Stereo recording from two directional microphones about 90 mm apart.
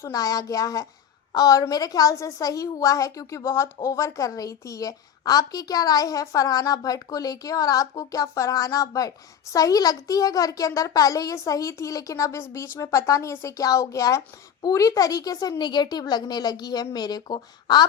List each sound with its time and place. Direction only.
0.0 s a woman's voice: 40° left (ahead or behind)